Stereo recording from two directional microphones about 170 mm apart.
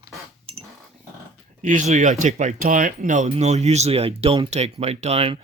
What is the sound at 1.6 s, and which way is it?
Speech, 50° right (ahead or behind).